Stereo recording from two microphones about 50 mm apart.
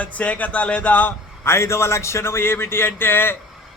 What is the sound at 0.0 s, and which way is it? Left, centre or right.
A man's voice, left.